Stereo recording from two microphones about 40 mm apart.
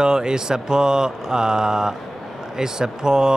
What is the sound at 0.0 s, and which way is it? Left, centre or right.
Speech, centre.